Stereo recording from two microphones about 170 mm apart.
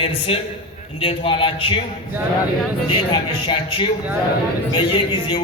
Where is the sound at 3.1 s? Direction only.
30° left (ahead or behind).